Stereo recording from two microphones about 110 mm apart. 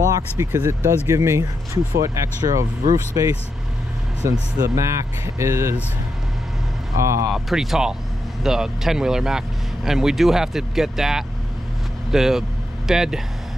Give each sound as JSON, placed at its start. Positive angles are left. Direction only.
{"t": 0.4, "sound": "speech", "side_deg": -25}
{"t": 7.0, "sound": "speech", "side_deg": -25}
{"t": 7.2, "sound": "speech", "side_deg": 0}